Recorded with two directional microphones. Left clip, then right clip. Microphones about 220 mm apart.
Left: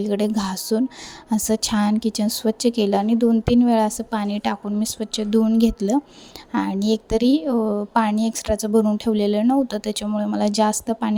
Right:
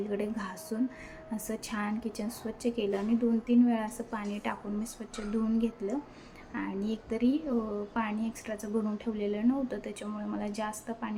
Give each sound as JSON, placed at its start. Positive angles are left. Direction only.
{"t": 0.0, "sound": "speech", "side_deg": 45}